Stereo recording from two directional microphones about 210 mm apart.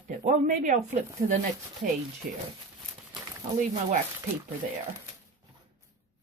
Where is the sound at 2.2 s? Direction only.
40° right (ahead or behind).